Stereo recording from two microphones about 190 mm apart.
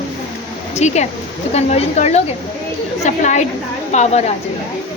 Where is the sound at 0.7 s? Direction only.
35° left (ahead or behind).